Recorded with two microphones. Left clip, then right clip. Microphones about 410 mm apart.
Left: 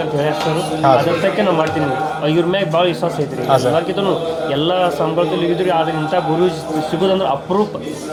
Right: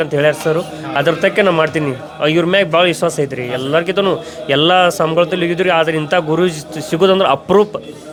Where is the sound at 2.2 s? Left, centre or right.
Right.